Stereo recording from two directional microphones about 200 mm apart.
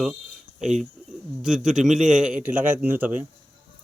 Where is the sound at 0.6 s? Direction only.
35° right (ahead or behind).